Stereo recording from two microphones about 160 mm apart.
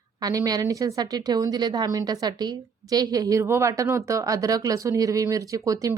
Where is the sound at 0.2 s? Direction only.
25° right (ahead or behind).